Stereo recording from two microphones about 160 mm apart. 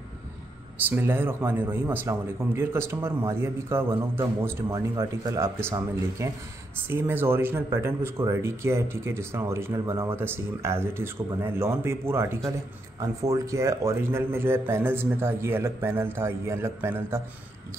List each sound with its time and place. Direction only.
0.8 s speech: 15° right (ahead or behind)